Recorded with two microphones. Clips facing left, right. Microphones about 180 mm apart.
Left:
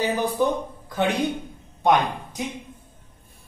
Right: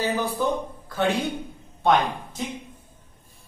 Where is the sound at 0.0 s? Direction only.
15° left (ahead or behind).